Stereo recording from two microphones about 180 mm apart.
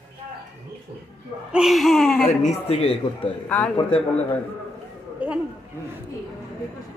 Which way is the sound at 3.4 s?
5° left (ahead or behind).